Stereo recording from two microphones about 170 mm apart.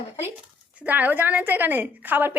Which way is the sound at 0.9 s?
10° right (ahead or behind).